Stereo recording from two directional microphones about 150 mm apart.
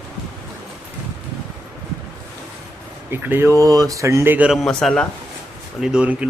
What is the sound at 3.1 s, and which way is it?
Speech, 15° right (ahead or behind).